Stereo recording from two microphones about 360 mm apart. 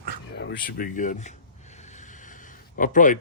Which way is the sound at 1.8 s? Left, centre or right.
Centre.